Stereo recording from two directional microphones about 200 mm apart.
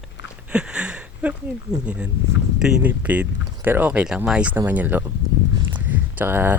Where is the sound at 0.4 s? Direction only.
5° right (ahead or behind).